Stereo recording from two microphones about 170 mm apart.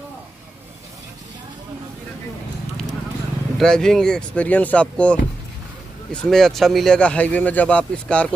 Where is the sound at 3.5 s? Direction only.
5° left (ahead or behind).